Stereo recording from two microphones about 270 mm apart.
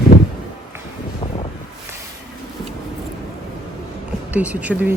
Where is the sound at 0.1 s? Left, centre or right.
Left.